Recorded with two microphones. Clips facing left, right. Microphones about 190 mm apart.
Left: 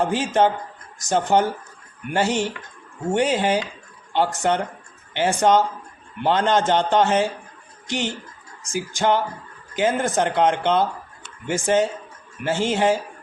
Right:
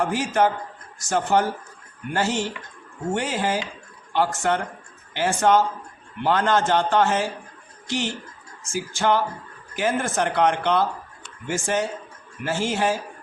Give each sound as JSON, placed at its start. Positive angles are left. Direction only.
{"t": 0.0, "sound": "speech", "side_deg": 20}